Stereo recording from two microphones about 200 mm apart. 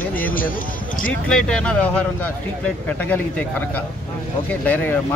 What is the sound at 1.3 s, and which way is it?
Speech, 5° left (ahead or behind).